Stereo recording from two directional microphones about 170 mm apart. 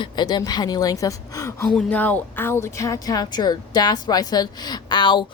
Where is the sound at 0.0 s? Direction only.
25° left (ahead or behind).